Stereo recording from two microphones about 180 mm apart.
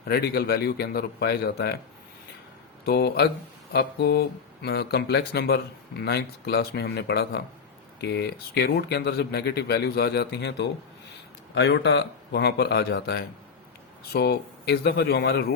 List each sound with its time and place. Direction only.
0.1 s speech: 60° left (ahead or behind)
2.8 s speech: 60° left (ahead or behind)